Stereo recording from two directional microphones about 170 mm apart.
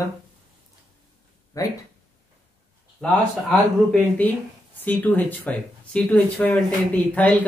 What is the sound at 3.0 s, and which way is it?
Speech, 5° left (ahead or behind).